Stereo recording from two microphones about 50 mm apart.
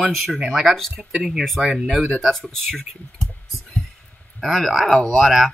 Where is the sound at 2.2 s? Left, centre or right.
Centre.